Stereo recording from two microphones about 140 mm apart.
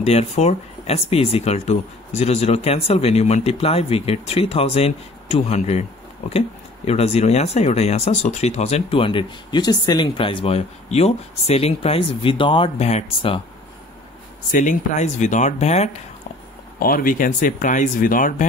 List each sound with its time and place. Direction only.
0.0 s speech: 50° left (ahead or behind)
14.5 s speech: 65° left (ahead or behind)
16.8 s speech: 85° left